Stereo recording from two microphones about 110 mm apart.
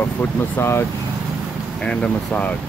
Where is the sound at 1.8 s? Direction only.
10° left (ahead or behind).